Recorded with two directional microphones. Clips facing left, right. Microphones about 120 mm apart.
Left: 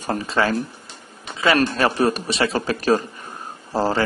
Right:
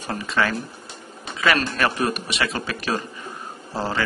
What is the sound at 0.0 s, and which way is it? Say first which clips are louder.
A man's voice: left 3 dB; 40° left (ahead or behind).